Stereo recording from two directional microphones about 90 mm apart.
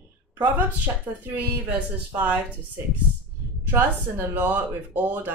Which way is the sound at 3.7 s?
20° right (ahead or behind).